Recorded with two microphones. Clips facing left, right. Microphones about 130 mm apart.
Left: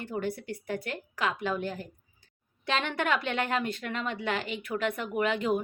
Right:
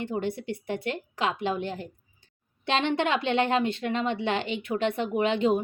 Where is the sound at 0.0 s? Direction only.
25° right (ahead or behind).